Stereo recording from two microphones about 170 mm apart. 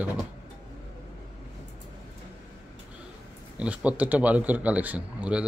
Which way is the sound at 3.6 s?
5° right (ahead or behind).